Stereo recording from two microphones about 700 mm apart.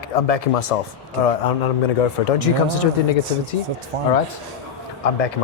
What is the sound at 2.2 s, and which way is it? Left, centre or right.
Speech, left.